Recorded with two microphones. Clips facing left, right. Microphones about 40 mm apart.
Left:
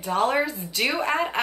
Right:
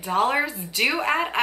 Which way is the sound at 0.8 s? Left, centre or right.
Centre.